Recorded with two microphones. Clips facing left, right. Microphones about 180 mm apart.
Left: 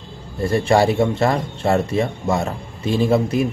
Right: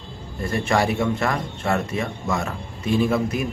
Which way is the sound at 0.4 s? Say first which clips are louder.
Left 6 dB; 30° left (ahead or behind).